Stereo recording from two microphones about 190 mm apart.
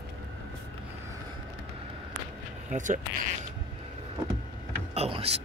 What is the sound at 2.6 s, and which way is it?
Speech, 40° right (ahead or behind).